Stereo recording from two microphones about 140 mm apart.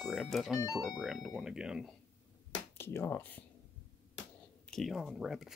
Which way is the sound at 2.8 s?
15° left (ahead or behind).